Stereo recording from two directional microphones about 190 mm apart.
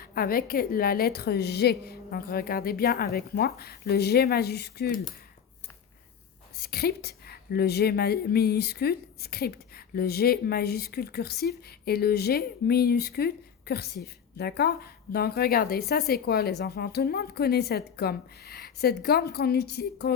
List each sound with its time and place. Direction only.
0.0 s a woman's voice: 50° left (ahead or behind)
6.6 s speech: 55° left (ahead or behind)